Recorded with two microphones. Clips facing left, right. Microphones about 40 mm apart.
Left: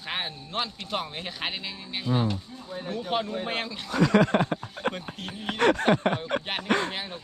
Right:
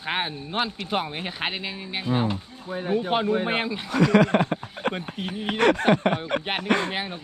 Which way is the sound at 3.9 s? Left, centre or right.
Right.